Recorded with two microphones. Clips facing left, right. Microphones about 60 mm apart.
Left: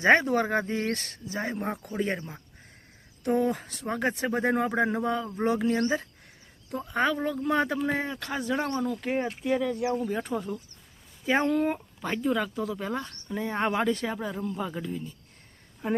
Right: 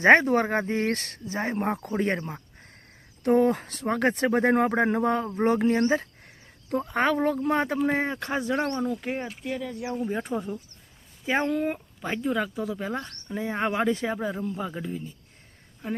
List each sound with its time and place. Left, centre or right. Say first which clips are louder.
0.0 s speech: right 3 dB; right
5.4 s speech: right 3 dB; right
6.7 s speech: right 3 dB; right
7.4 s speech: right 2 dB; right
8.8 s speech: right 1 dB; centre
9.2 s speech: left 5 dB; centre
10.0 s speech: right 1 dB; centre
13.0 s speech: even; centre
13.3 s speech: even; centre
15.8 s speech: left 4 dB; centre